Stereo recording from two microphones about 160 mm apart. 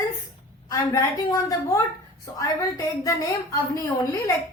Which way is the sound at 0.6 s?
25° left (ahead or behind).